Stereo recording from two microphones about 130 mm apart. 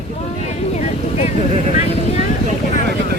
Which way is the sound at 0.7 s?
55° left (ahead or behind).